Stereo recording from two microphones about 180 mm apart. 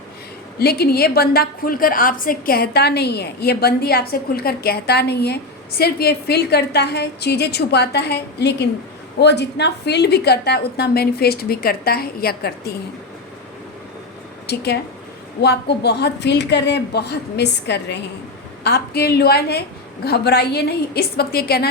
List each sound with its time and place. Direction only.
0.6 s a woman's voice: 60° left (ahead or behind)
14.4 s a woman's voice: 65° left (ahead or behind)